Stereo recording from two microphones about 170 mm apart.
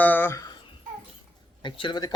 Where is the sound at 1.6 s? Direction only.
25° left (ahead or behind).